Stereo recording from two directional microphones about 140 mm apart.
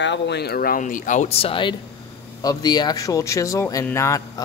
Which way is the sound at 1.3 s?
40° left (ahead or behind).